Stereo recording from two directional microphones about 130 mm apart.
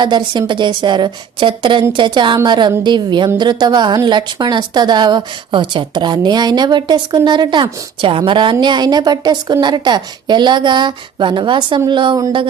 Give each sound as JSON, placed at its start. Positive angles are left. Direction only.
{"t": 0.0, "sound": "a woman's voice", "side_deg": -35}